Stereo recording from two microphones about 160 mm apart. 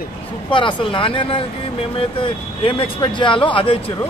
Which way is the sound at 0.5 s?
30° left (ahead or behind).